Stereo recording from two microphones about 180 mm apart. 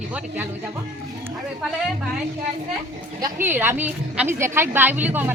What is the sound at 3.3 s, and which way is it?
A woman's voice, 10° right (ahead or behind).